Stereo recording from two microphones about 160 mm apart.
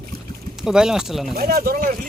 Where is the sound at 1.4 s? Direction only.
75° right (ahead or behind).